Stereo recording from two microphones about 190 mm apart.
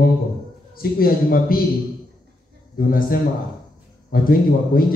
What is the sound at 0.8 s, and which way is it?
Speech, 50° left (ahead or behind).